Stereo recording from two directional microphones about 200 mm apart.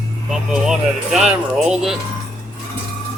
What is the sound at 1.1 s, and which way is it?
Speech, 5° right (ahead or behind).